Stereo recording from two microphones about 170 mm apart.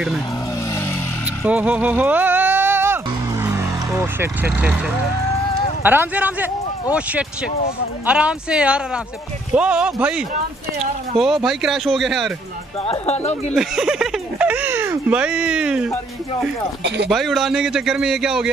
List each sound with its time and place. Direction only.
1.4 s music: 10° right (ahead or behind)
5.8 s speech: 10° right (ahead or behind)
12.8 s speech: 35° left (ahead or behind)
13.6 s speech: 5° right (ahead or behind)
16.8 s speech: 90° right
17.1 s speech: centre (ahead or behind)